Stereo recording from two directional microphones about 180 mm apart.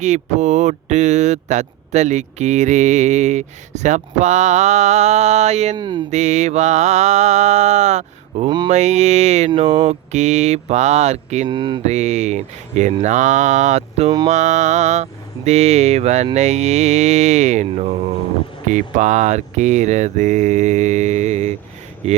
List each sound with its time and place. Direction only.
0.0 s speech: 40° right (ahead or behind)
5.7 s mantra: 25° right (ahead or behind)
6.1 s speech: 40° right (ahead or behind)
8.4 s mantra: 25° right (ahead or behind)
8.7 s speech: 40° right (ahead or behind)
11.4 s mantra: 25° right (ahead or behind)
11.8 s speech: 40° right (ahead or behind)